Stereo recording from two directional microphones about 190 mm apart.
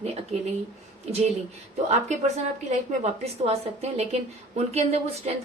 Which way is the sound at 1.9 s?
35° right (ahead or behind).